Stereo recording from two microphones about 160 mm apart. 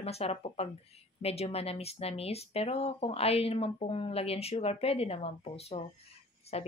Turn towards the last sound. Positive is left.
turn(degrees=40)  # may be behind; listen again after turning